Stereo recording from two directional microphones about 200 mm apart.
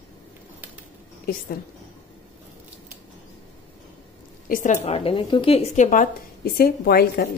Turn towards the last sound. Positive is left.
turn(degrees=50)  # may be behind; listen again after turning